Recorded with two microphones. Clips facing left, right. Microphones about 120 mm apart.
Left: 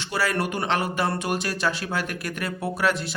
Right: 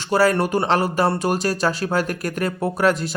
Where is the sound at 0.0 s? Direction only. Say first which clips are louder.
Right 8 dB; 40° right (ahead or behind).